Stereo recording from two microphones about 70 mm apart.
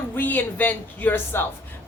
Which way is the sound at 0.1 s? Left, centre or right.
Left.